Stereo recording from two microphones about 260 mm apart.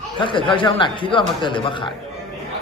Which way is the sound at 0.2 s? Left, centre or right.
Centre.